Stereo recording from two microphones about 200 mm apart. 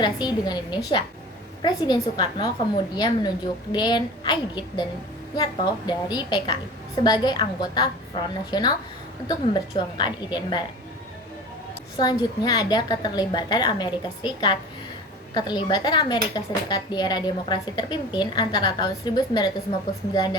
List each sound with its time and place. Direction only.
0.0 s speech: 20° left (ahead or behind)
11.9 s speech: 20° left (ahead or behind)